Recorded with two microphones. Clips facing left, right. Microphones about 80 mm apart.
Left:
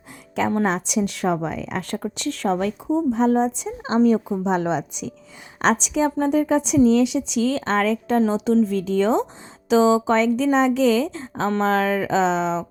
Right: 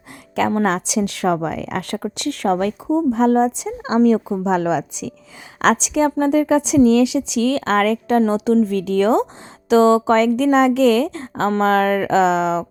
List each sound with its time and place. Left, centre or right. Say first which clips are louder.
0.6 s a woman's voice: right 3 dB; right